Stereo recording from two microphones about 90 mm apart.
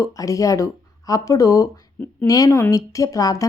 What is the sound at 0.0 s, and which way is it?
A woman's voice, 40° left (ahead or behind).